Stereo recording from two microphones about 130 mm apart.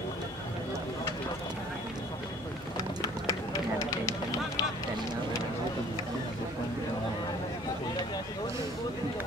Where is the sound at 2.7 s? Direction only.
25° left (ahead or behind).